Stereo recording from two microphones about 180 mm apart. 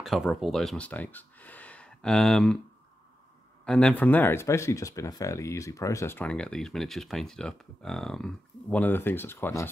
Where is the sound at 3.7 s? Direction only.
5° left (ahead or behind).